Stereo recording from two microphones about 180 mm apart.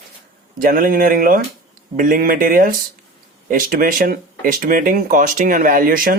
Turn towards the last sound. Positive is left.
turn(degrees=-55)  # may be behind; listen again after turning